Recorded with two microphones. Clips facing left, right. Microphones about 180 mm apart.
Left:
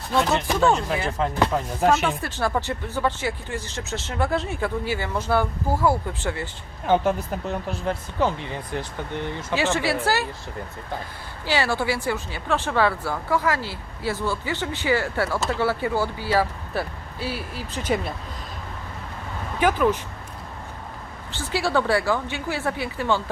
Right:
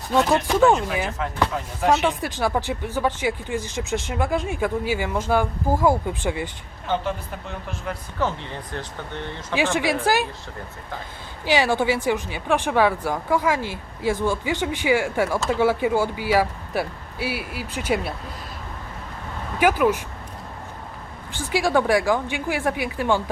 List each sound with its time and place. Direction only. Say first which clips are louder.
0.1 s speech: right 3 dB; 10° right (ahead or behind)
2.2 s speech: right 1 dB; 15° right (ahead or behind)
6.8 s speech: left 5 dB; 45° left (ahead or behind)
8.2 s speech: left 1 dB; 15° left (ahead or behind)
9.7 s speech: right 2 dB; 15° right (ahead or behind)
11.4 s speech: right 3 dB; 15° right (ahead or behind)
19.5 s speech: right 2 dB; 10° right (ahead or behind)
21.3 s speech: right 2 dB; 15° right (ahead or behind)